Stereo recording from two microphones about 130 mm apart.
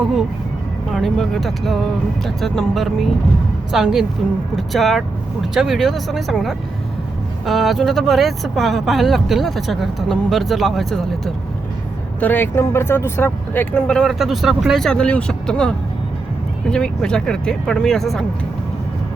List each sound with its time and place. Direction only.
0.0 s speech: centre (ahead or behind)
12.2 s speech: 15° left (ahead or behind)